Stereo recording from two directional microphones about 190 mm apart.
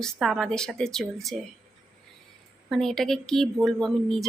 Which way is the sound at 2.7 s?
Centre (ahead or behind).